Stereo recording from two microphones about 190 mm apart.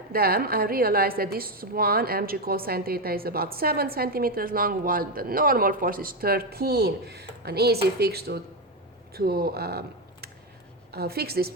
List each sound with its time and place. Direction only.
0.1 s a woman's voice: 50° right (ahead or behind)